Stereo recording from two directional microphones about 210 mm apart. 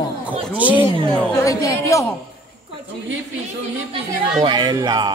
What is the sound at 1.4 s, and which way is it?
Speech, 15° left (ahead or behind).